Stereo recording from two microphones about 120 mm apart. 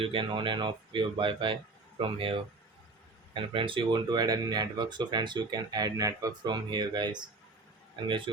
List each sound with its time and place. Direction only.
0.0 s speech: 45° right (ahead or behind)